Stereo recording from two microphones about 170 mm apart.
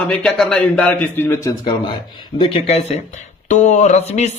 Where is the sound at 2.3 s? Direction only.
30° left (ahead or behind).